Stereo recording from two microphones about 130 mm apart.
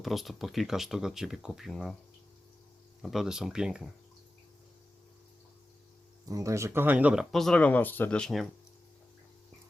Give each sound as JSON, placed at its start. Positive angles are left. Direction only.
{"t": 0.0, "sound": "speech", "side_deg": 0}
{"t": 3.0, "sound": "speech", "side_deg": 0}
{"t": 6.2, "sound": "speech", "side_deg": -25}
{"t": 7.3, "sound": "speech", "side_deg": 0}